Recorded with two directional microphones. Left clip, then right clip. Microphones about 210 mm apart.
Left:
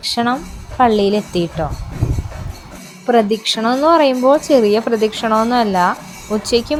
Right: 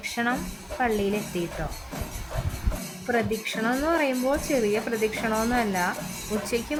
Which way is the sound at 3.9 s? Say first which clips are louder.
Left 15 dB; 25° left (ahead or behind).